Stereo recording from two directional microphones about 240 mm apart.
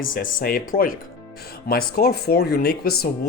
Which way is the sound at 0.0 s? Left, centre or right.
Left.